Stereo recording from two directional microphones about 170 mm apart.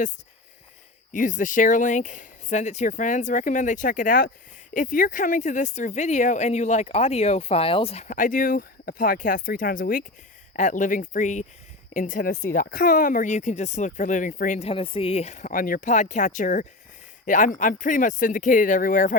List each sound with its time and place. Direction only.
1.1 s speech: 50° left (ahead or behind)
8.0 s speech: 50° left (ahead or behind)
10.5 s speech: 45° left (ahead or behind)
14.7 s speech: 30° left (ahead or behind); by 19.1 s 50° left (ahead or behind)